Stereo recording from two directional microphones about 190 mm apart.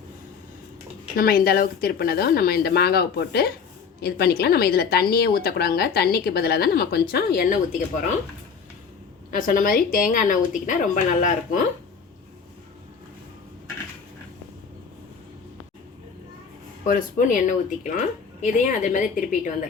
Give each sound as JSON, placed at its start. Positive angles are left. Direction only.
{"t": 1.1, "sound": "a woman's voice", "side_deg": 50}
{"t": 9.3, "sound": "a woman's voice", "side_deg": 45}
{"t": 16.8, "sound": "a woman's voice", "side_deg": 45}